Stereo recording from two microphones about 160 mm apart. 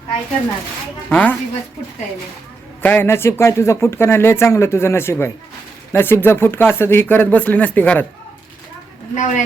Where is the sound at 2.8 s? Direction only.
15° left (ahead or behind).